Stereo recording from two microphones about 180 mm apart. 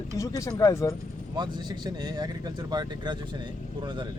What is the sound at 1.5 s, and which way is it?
Speech, 25° right (ahead or behind).